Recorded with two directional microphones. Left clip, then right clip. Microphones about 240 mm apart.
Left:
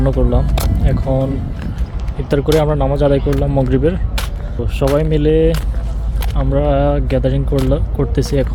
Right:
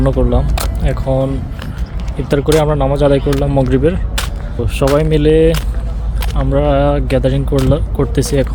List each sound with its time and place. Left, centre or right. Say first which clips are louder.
0.0 s speech: right 2 dB; centre
2.3 s speech: right 2 dB; centre